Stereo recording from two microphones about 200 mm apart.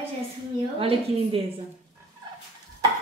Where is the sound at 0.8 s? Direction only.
30° right (ahead or behind).